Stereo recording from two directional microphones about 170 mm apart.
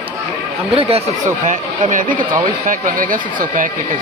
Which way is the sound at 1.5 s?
50° right (ahead or behind).